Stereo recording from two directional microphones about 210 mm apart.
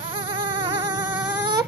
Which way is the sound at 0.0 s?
25° right (ahead or behind).